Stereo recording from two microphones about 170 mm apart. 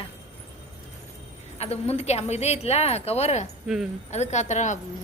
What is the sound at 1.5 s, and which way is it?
A woman's voice, 35° left (ahead or behind).